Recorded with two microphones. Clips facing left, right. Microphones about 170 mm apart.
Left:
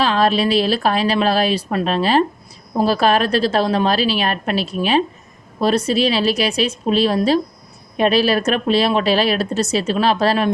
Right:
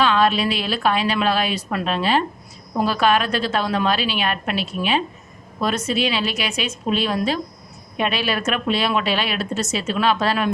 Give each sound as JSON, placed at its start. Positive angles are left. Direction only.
{"t": 0.0, "sound": "speech", "side_deg": 35}